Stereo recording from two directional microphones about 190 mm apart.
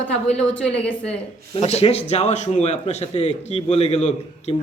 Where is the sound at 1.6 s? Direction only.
35° left (ahead or behind).